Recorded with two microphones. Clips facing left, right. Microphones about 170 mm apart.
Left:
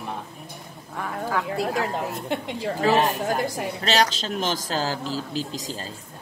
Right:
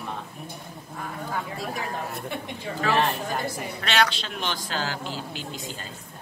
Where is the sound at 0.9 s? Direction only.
75° left (ahead or behind).